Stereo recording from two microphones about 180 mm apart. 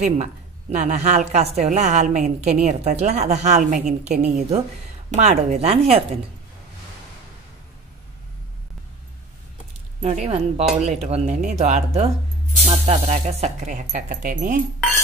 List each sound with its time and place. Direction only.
0.0 s a woman's voice: 40° right (ahead or behind)
10.0 s a woman's voice: 35° right (ahead or behind)